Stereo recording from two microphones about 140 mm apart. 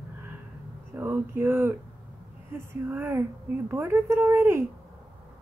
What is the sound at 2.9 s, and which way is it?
A woman's voice, 15° right (ahead or behind).